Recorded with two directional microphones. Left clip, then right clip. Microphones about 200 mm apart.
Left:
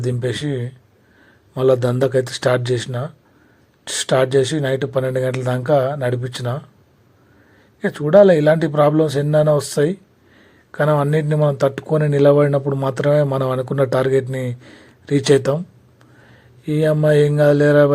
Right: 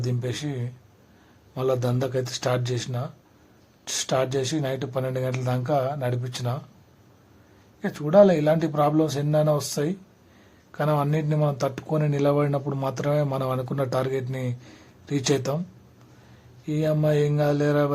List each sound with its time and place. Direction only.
0.0 s speech: 20° left (ahead or behind)
7.8 s speech: 20° left (ahead or behind)
16.6 s speech: 20° left (ahead or behind)